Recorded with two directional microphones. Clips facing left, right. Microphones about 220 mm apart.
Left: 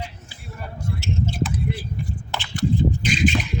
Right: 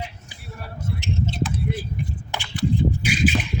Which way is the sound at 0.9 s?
20° right (ahead or behind).